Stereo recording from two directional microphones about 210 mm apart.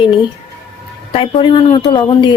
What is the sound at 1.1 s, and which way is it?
A woman's voice, 25° left (ahead or behind).